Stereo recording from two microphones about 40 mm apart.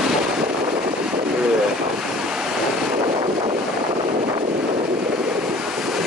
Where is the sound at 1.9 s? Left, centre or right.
Centre.